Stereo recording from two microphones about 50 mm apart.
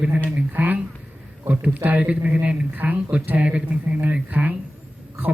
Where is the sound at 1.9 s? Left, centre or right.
Right.